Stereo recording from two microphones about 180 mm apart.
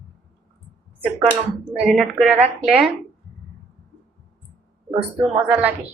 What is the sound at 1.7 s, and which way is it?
Speech, 5° right (ahead or behind).